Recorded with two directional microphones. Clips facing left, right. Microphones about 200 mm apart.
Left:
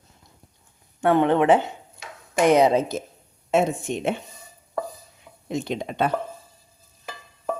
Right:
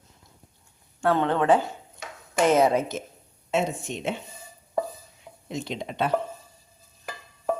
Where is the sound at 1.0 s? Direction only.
15° left (ahead or behind).